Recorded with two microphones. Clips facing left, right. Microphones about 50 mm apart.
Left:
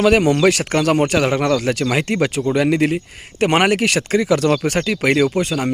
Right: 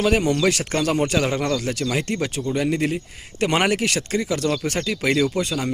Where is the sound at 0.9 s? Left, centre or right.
Left.